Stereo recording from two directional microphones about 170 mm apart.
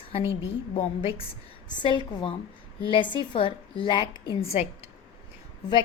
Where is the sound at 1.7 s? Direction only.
25° left (ahead or behind).